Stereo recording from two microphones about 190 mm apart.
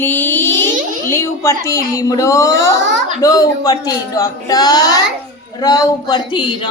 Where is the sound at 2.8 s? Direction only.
70° right (ahead or behind).